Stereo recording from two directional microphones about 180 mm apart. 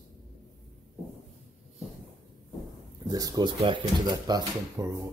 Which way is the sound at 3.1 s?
20° right (ahead or behind).